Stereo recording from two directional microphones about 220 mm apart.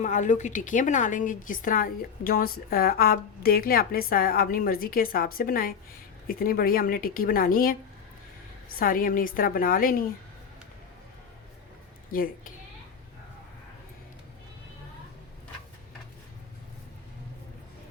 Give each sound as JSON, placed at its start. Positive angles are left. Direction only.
{"t": 0.0, "sound": "a woman's voice", "side_deg": 35}
{"t": 8.8, "sound": "a woman's voice", "side_deg": 40}
{"t": 12.1, "sound": "a woman's voice", "side_deg": 40}